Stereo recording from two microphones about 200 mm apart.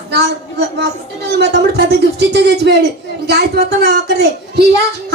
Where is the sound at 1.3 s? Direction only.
60° right (ahead or behind).